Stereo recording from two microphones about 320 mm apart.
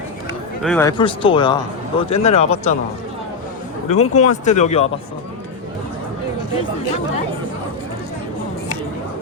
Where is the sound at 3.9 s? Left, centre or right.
Left.